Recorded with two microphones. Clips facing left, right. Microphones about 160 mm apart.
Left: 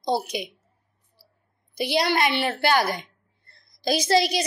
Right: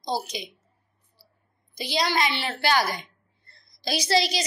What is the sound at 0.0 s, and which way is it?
Speech, 60° left (ahead or behind).